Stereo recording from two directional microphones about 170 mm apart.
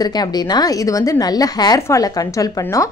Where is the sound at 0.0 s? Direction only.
25° left (ahead or behind).